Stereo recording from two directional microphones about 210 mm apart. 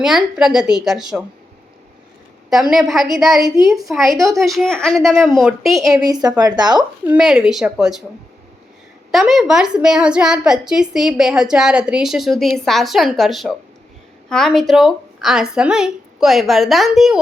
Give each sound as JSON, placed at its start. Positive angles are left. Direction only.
{"t": 0.0, "sound": "a woman's voice", "side_deg": 0}
{"t": 2.5, "sound": "a woman's voice", "side_deg": 0}
{"t": 5.9, "sound": "a woman's voice", "side_deg": -20}
{"t": 7.0, "sound": "a woman's voice", "side_deg": -5}
{"t": 9.1, "sound": "a woman's voice", "side_deg": 0}